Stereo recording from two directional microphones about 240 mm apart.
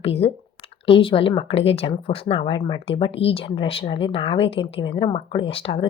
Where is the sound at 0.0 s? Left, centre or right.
Left.